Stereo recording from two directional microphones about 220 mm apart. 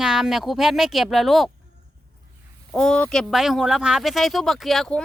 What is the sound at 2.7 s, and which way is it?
Speech, 5° left (ahead or behind).